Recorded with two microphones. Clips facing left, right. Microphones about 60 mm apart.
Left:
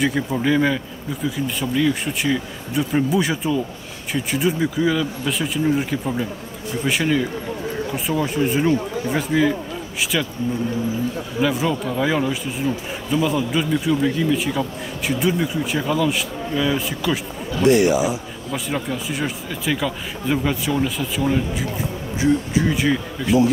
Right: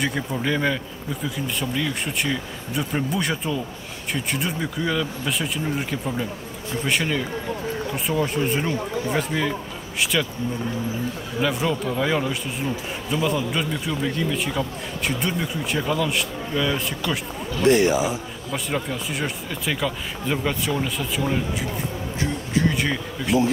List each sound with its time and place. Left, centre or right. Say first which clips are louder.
0.3 s a man's voice: left 4 dB; centre
11.4 s a man's voice: left 2 dB; centre
17.6 s a man's voice: left 2 dB; right
18.5 s a man's voice: left 2 dB; centre
22.2 s a man's voice: left 5 dB; centre